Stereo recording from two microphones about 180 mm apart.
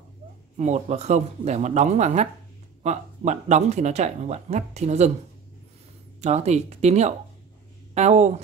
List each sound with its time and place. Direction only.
0.6 s speech: 40° right (ahead or behind)
6.2 s speech: 40° right (ahead or behind)